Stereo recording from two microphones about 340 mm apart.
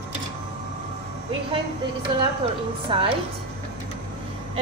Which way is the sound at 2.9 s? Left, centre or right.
Centre.